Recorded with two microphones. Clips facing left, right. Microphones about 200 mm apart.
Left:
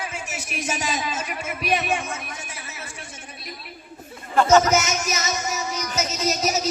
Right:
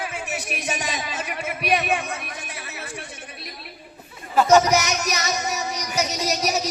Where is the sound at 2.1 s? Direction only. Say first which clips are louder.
Right 1 dB; 60° right (ahead or behind).